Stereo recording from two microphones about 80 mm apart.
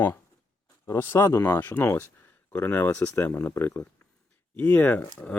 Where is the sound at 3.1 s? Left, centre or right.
Left.